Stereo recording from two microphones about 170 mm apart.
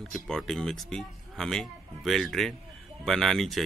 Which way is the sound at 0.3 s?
Centre (ahead or behind).